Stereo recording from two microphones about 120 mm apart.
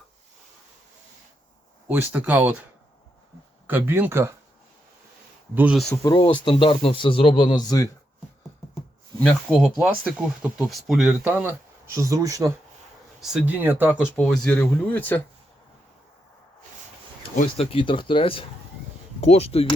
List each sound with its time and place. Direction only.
1.9 s speech: 15° right (ahead or behind)
3.7 s speech: 15° right (ahead or behind)
5.7 s speech: 5° left (ahead or behind)
6.1 s speech: 45° left (ahead or behind)
9.5 s speech: 5° right (ahead or behind)
11.9 s speech: 25° right (ahead or behind)
13.4 s speech: 15° right (ahead or behind)
14.2 s speech: 5° left (ahead or behind)
17.6 s speech: 50° left (ahead or behind)
19.2 s speech: 60° left (ahead or behind)